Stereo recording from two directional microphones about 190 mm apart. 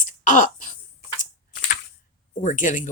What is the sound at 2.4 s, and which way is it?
Speech, 45° left (ahead or behind).